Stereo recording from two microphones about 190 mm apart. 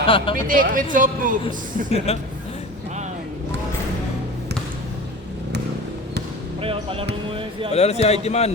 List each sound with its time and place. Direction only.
0.0 s speech: 25° left (ahead or behind)
0.3 s speech: 45° right (ahead or behind)
2.1 s a man's voice: 30° left (ahead or behind)
6.6 s basketball bounce: 30° right (ahead or behind)
7.7 s a man's voice: 35° left (ahead or behind)